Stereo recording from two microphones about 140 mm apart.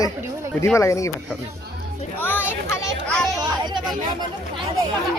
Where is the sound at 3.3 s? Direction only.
30° right (ahead or behind).